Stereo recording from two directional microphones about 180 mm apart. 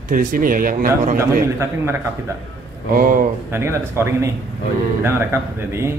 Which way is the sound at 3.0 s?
50° right (ahead or behind).